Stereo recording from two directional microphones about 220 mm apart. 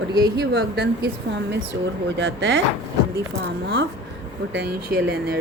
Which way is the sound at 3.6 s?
55° right (ahead or behind).